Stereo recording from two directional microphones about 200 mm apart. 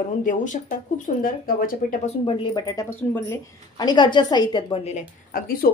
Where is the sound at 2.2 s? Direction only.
20° left (ahead or behind).